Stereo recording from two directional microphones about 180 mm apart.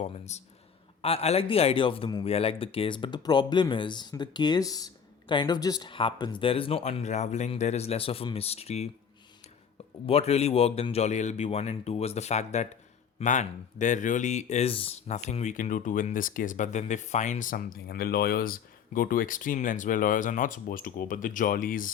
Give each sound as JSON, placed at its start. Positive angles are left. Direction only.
{"t": 0.0, "sound": "speech", "side_deg": 40}
{"t": 10.1, "sound": "speech", "side_deg": 35}